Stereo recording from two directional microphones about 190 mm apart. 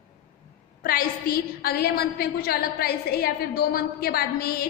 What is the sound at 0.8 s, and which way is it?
A woman's voice, 50° left (ahead or behind).